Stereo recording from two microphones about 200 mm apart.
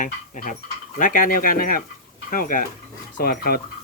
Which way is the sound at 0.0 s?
40° left (ahead or behind).